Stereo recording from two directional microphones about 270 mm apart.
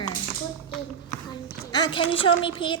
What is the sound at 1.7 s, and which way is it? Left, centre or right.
A child's voice, centre.